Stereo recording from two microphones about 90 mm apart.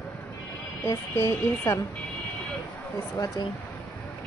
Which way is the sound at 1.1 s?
30° left (ahead or behind).